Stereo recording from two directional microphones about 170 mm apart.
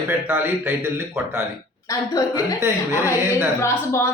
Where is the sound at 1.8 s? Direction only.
20° left (ahead or behind).